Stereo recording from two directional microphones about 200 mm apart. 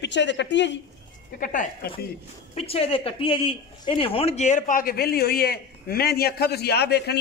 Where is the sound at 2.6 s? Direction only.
30° left (ahead or behind).